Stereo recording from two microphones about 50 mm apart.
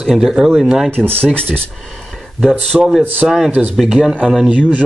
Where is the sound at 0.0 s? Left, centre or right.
Centre.